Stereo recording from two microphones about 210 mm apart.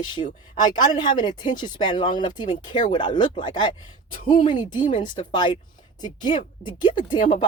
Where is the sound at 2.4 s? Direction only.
35° left (ahead or behind).